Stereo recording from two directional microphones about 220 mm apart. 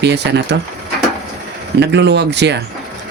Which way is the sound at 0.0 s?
50° right (ahead or behind).